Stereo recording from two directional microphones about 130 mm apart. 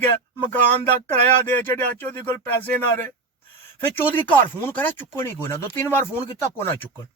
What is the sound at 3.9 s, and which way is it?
Speech, 15° left (ahead or behind).